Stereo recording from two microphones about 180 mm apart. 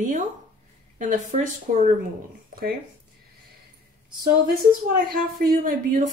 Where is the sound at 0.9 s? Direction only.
45° right (ahead or behind).